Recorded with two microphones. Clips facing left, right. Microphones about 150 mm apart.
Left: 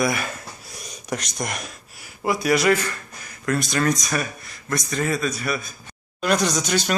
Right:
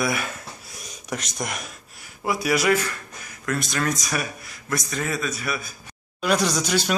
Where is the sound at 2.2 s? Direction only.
5° right (ahead or behind).